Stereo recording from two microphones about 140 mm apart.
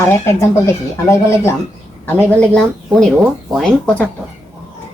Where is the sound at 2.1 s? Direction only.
15° left (ahead or behind).